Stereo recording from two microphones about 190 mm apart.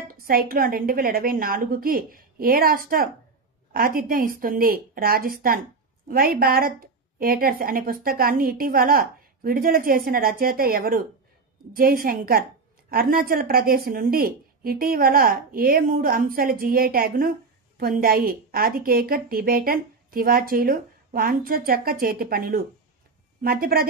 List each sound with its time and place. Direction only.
0.1 s a woman's voice: 50° right (ahead or behind)